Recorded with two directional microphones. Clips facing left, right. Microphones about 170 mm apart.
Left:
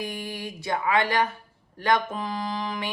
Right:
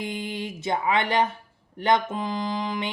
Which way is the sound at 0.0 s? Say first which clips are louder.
Right 2 dB; 20° right (ahead or behind).